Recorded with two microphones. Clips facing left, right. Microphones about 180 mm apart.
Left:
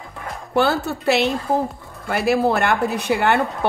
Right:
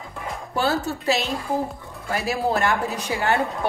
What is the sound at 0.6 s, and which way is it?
A woman's voice, 65° left (ahead or behind).